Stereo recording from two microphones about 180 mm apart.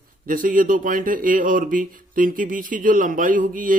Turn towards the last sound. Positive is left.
turn(degrees=-50)  # may be behind; listen again after turning